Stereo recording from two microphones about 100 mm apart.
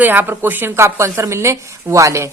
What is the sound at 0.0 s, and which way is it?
Speech, 20° right (ahead or behind).